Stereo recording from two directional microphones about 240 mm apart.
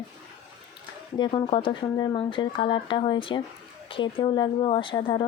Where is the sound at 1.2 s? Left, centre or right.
Centre.